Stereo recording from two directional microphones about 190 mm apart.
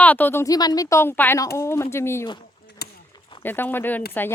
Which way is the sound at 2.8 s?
55° left (ahead or behind).